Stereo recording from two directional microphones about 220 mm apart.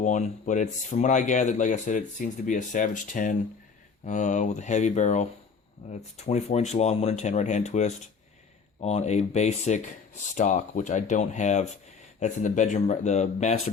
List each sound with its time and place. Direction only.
0.0 s speech: 35° left (ahead or behind)